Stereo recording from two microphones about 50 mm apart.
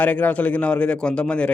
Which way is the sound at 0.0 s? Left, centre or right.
Left.